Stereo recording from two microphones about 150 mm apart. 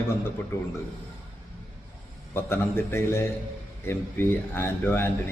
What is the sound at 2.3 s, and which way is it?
A man's voice, 15° left (ahead or behind).